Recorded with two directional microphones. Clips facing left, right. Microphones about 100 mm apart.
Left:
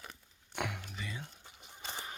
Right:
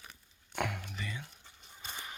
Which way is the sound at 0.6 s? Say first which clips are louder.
Right 3 dB; 15° left (ahead or behind).